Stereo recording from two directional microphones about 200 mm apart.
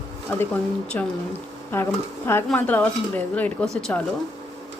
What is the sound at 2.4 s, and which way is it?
Speech, 5° left (ahead or behind).